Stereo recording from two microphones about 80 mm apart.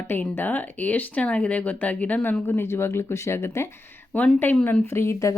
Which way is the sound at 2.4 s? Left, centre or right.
Left.